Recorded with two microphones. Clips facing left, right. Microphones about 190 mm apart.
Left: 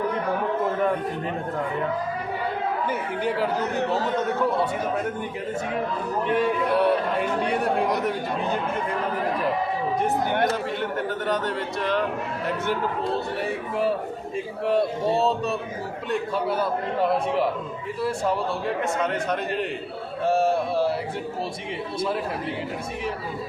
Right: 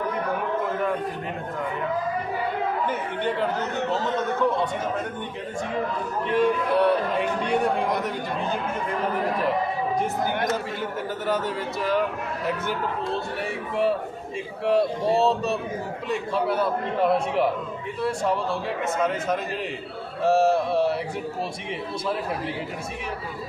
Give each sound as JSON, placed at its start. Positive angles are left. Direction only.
{"t": 3.2, "sound": "speech", "side_deg": 5}
{"t": 6.3, "sound": "a man's voice", "side_deg": 0}
{"t": 11.3, "sound": "a man's voice", "side_deg": -5}
{"t": 14.7, "sound": "a man's voice", "side_deg": 0}
{"t": 18.9, "sound": "a man's voice", "side_deg": 0}